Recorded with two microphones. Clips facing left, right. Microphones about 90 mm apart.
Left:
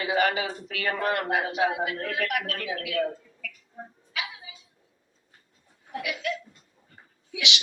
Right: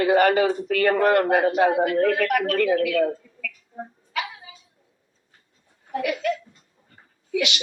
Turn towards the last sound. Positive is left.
turn(degrees=-50)  # may be behind; listen again after turning